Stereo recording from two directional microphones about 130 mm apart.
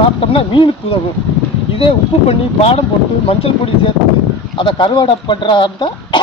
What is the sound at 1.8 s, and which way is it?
Speech, 50° left (ahead or behind).